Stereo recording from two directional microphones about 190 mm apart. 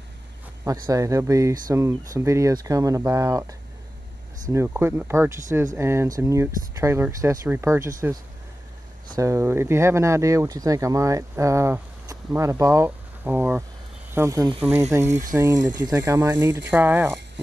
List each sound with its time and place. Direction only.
0.8 s speech: 15° right (ahead or behind)
9.1 s speech: 15° right (ahead or behind)